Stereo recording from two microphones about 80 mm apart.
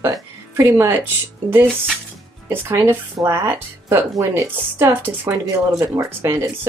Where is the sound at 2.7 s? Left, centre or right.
Right.